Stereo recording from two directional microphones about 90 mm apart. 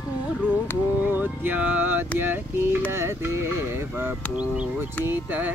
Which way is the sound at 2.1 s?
25° right (ahead or behind).